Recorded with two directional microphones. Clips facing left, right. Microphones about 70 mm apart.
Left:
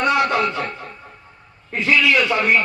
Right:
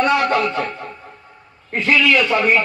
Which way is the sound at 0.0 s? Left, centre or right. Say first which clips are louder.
Right 1 dB; right.